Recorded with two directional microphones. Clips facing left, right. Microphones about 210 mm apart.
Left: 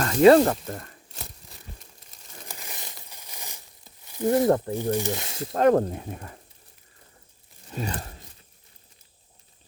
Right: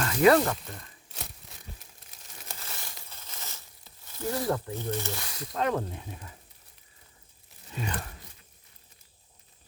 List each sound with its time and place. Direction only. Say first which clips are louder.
0.0 s speech: left 6 dB; 30° left (ahead or behind); by 0.9 s 50° left (ahead or behind)
1.0 s tearing: left 1 dB; centre (ahead or behind)
2.6 s crumpling: left 2 dB; 15° left (ahead or behind)
4.0 s a sound: left 9 dB; 15° left (ahead or behind)
4.7 s speech: left 7 dB; 15° left (ahead or behind)
5.5 s speech: left 10 dB; 45° left (ahead or behind)
7.7 s a sound: left 4 dB; 40° left (ahead or behind)